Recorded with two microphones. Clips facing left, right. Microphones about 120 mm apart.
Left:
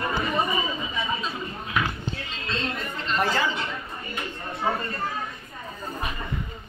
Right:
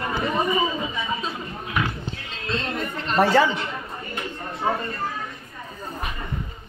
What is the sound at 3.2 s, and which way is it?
Speech, 80° right.